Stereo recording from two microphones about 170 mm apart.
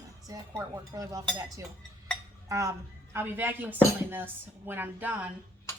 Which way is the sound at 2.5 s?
20° right (ahead or behind).